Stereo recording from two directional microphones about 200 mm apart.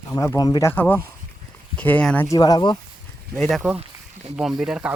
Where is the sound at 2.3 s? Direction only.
20° left (ahead or behind).